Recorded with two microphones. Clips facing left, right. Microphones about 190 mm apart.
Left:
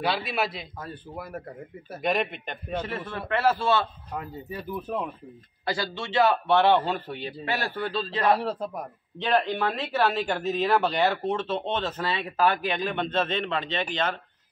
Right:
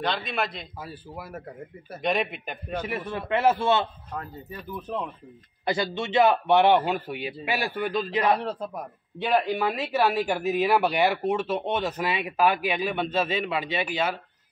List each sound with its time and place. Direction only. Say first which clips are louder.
0.0 s a man's voice: left 1 dB; 5° left (ahead or behind); by 3.8 s 20° right (ahead or behind)
4.1 s a man's voice: left 2 dB; 10° left (ahead or behind)
5.9 s speech: right 2 dB; 20° right (ahead or behind)
8.4 s a man's voice: left 1 dB; centre (ahead or behind)
9.2 s speech: right 1 dB; 10° right (ahead or behind)